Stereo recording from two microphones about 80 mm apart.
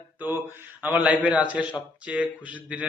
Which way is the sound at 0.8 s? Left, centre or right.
Centre.